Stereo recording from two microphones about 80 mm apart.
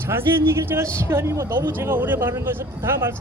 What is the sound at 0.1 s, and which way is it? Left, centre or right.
A man's voice, right.